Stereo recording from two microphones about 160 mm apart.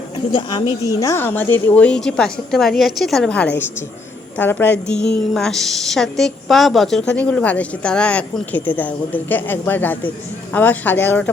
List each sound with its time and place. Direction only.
0.3 s a woman's voice: 30° left (ahead or behind)
0.9 s a woman's voice: 20° left (ahead or behind)